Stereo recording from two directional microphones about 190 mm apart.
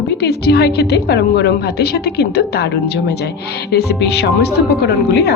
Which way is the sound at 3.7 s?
60° left (ahead or behind).